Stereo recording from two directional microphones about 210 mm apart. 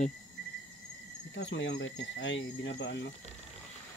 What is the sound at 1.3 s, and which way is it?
Speech, 55° left (ahead or behind).